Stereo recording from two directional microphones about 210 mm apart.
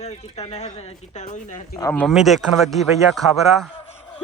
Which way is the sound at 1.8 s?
15° left (ahead or behind).